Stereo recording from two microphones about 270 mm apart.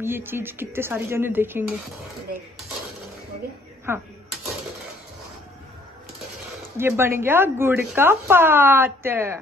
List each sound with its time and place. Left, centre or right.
0.0 s speech: centre
3.9 s speech: centre
6.8 s speech: centre